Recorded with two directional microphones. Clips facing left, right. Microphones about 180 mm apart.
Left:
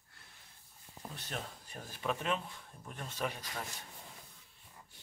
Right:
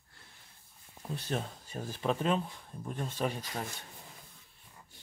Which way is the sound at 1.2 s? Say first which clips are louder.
Right 8 dB; 30° right (ahead or behind).